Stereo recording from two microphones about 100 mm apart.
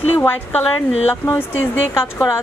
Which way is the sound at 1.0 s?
20° left (ahead or behind).